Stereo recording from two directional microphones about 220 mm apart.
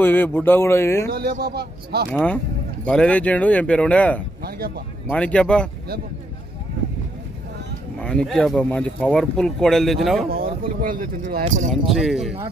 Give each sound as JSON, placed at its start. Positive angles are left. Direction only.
{"t": 0.0, "sound": "speech", "side_deg": 10}
{"t": 1.1, "sound": "speech", "side_deg": -45}
{"t": 2.1, "sound": "speech", "side_deg": 5}
{"t": 4.4, "sound": "speech", "side_deg": -45}
{"t": 5.1, "sound": "speech", "side_deg": 5}
{"t": 8.0, "sound": "speech", "side_deg": 5}
{"t": 10.3, "sound": "speech", "side_deg": -40}
{"t": 11.7, "sound": "speech", "side_deg": 0}